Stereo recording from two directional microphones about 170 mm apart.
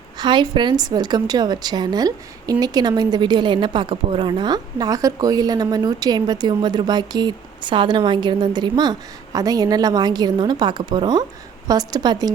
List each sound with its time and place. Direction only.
0.2 s a woman's voice: 25° right (ahead or behind)